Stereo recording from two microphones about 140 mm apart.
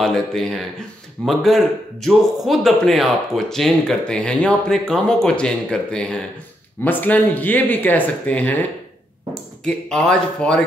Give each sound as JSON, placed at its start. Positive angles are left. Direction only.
{"t": 0.0, "sound": "speech", "side_deg": 0}